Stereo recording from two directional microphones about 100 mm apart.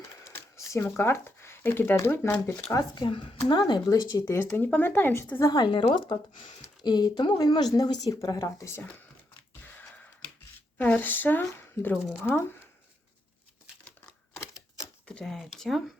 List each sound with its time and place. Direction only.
0.3 s speech: 30° left (ahead or behind)
2.7 s speech: 50° left (ahead or behind)
4.4 s speech: 25° left (ahead or behind)
5.4 s speech: 40° left (ahead or behind)
5.8 s speech: 55° left (ahead or behind)
6.6 s speech: 40° left (ahead or behind)
9.6 s a sound: 15° left (ahead or behind)
10.8 s speech: 15° left (ahead or behind)
15.0 s speech: 5° left (ahead or behind)